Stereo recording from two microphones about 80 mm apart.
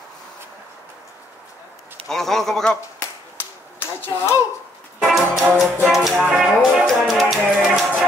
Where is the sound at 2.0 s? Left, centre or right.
Centre.